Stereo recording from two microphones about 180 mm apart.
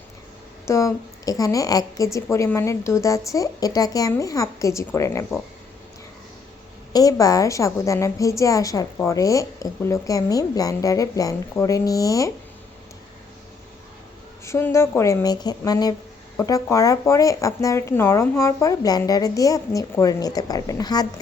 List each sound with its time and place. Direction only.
0.6 s a woman's voice: 15° left (ahead or behind)
6.9 s a woman's voice: 20° left (ahead or behind)
14.4 s speech: 15° left (ahead or behind)